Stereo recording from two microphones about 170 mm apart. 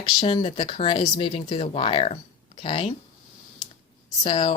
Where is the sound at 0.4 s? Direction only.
35° left (ahead or behind).